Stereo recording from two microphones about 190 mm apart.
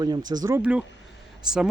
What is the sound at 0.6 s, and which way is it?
Speech, 5° right (ahead or behind).